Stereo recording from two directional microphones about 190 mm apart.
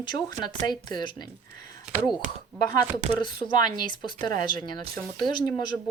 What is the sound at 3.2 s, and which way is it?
Speech, 25° left (ahead or behind).